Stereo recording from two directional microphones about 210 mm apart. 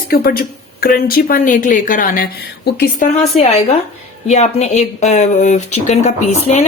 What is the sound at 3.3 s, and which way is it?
A woman's voice, 30° left (ahead or behind).